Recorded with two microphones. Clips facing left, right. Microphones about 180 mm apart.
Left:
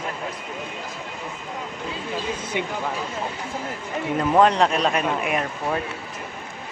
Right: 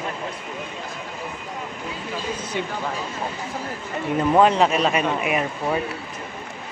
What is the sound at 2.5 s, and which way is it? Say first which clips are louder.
Speech: left 1 dB; 15° left (ahead or behind).